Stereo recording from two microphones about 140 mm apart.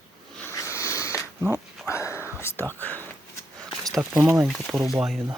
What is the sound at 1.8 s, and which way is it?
Whispering, 20° left (ahead or behind).